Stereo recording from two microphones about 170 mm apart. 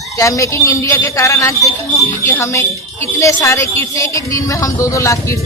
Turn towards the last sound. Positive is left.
turn(degrees=20)  # may be behind; listen again after turning